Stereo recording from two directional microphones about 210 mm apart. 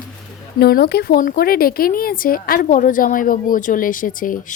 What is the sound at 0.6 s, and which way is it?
Speech, 50° left (ahead or behind).